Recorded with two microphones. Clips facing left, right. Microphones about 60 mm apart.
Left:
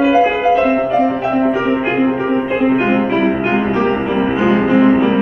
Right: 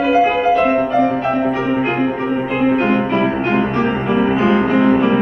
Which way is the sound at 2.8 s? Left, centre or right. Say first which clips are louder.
Left 1 dB; centre.